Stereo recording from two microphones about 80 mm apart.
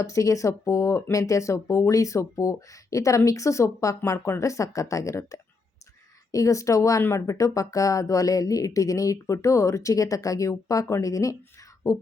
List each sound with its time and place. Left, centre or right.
0.0 s speech: left